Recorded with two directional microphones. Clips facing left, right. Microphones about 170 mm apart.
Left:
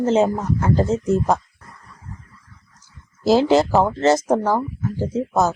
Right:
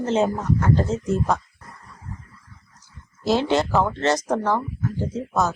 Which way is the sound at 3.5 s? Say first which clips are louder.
Left 5 dB; 30° left (ahead or behind).